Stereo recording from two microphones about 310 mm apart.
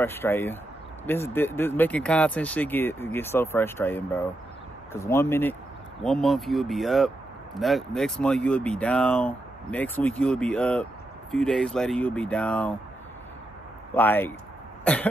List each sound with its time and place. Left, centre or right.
0.0 s speech: centre
13.9 s speech: centre